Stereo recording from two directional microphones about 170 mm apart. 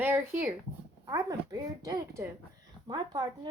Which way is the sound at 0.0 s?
10° right (ahead or behind).